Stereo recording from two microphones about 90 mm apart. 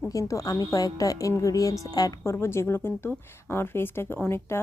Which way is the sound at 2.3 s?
30° left (ahead or behind).